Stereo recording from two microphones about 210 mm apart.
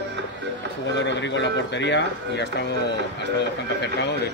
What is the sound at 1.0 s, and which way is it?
A man's voice, 60° left (ahead or behind).